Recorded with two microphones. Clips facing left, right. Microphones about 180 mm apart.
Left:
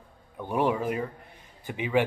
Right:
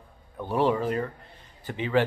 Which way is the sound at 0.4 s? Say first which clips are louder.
Right 2 dB; 15° left (ahead or behind).